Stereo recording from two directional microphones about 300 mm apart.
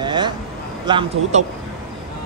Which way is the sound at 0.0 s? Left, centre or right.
Centre.